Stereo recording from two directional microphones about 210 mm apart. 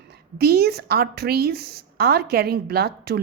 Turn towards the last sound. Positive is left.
turn(degrees=-50)  # may be behind; listen again after turning